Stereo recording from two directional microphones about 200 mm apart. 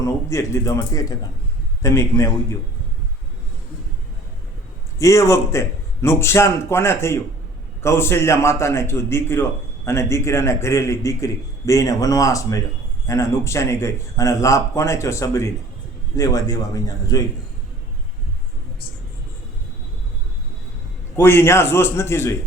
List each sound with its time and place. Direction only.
0.0 s a man's voice: 15° left (ahead or behind)
4.9 s a man's voice: 15° left (ahead or behind)
21.2 s a man's voice: 10° left (ahead or behind)